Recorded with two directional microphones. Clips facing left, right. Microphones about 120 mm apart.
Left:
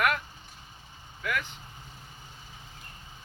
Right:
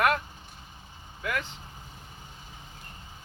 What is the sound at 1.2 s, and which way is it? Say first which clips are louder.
Speech: even; 30° right (ahead or behind).